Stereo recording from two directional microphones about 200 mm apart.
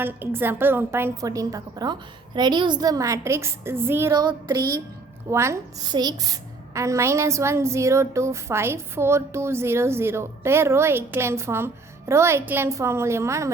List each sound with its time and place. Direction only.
0.0 s a woman's voice: 10° right (ahead or behind)